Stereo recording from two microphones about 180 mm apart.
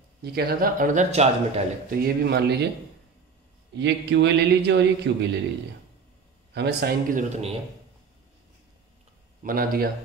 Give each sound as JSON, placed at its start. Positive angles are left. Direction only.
{"t": 0.2, "sound": "a man's voice", "side_deg": -60}
{"t": 1.9, "sound": "a man's voice", "side_deg": -70}
{"t": 3.7, "sound": "a man's voice", "side_deg": -75}
{"t": 6.5, "sound": "a man's voice", "side_deg": -65}
{"t": 9.4, "sound": "a man's voice", "side_deg": -50}